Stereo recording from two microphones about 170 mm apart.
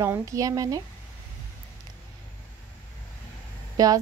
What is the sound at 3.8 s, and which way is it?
Speech, 20° right (ahead or behind).